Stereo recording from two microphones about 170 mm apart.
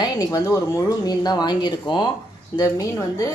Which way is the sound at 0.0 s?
25° left (ahead or behind).